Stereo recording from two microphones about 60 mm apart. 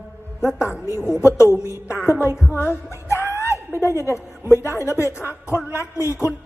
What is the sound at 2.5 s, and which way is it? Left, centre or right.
A woman's voice, left.